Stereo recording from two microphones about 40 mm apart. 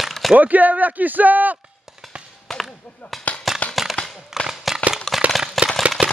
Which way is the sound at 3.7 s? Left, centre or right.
Centre.